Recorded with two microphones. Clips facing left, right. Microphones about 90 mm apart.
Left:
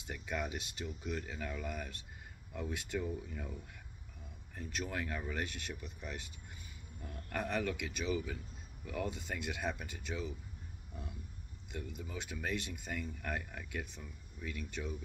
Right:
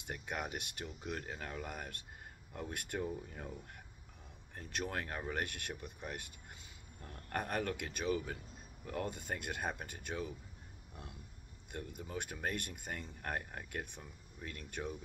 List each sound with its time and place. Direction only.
0.0 s speech: 40° right (ahead or behind)
1.2 s speech: 40° right (ahead or behind)
4.6 s speech: 55° right (ahead or behind)
7.3 s speech: 50° right (ahead or behind)
11.7 s speech: 50° right (ahead or behind)
13.2 s speech: 40° right (ahead or behind)